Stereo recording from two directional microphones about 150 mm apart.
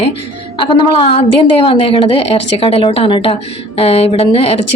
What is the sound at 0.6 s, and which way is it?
A woman's voice, 35° left (ahead or behind).